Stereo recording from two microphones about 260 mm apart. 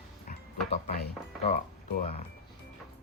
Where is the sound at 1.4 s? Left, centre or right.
Left.